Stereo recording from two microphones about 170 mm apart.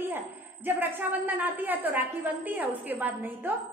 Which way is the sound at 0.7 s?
10° right (ahead or behind).